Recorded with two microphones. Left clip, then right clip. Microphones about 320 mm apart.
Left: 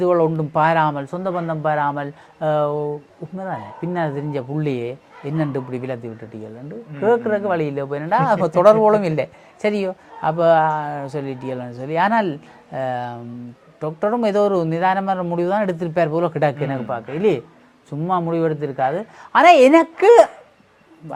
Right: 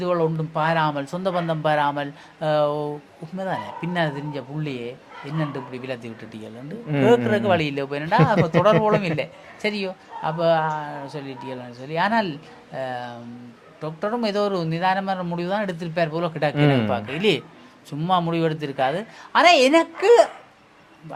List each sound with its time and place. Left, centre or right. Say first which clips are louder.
0.0 s a woman's voice: left 5 dB; left
0.9 s speech: left 1 dB; left
4.3 s a woman's voice: left 7 dB; left
7.0 s speech: left 1 dB; left
8.3 s speech: left 8 dB; left
16.9 s speech: left 2 dB; left
19.3 s a woman's voice: left 5 dB; left